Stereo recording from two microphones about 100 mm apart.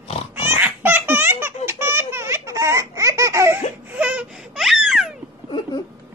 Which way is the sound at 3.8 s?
15° right (ahead or behind).